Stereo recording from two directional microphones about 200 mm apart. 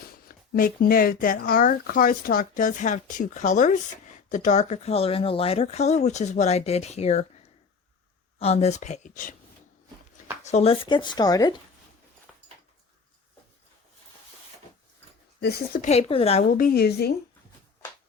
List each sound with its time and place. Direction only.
0.3 s speech: 45° left (ahead or behind)
8.4 s speech: 30° left (ahead or behind)
10.4 s speech: 35° left (ahead or behind)
15.4 s speech: 50° left (ahead or behind)
15.8 s speech: 30° left (ahead or behind)
16.6 s speech: 50° left (ahead or behind)